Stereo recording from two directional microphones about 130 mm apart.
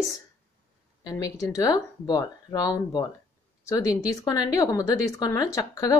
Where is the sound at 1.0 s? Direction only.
25° left (ahead or behind).